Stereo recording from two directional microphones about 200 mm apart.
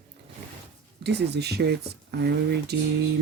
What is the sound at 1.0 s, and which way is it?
Speech, 55° right (ahead or behind).